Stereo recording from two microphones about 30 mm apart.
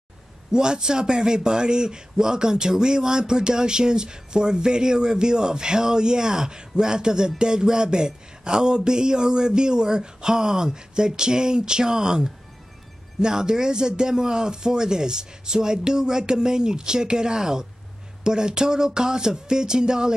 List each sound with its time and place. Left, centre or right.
0.5 s a man's voice: right